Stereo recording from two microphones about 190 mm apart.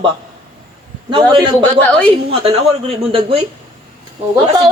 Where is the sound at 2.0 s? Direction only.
30° right (ahead or behind).